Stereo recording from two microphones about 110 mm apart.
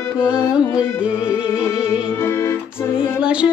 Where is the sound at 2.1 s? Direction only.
25° left (ahead or behind).